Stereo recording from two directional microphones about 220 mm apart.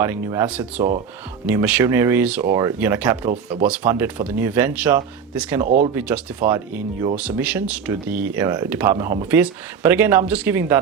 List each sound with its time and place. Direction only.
0.0 s speech: 10° right (ahead or behind)
5.6 s speech: 40° right (ahead or behind)
5.9 s speech: 5° right (ahead or behind)